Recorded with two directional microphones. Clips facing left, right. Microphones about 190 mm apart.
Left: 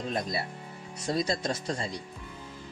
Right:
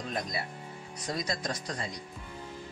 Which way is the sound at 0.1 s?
30° left (ahead or behind).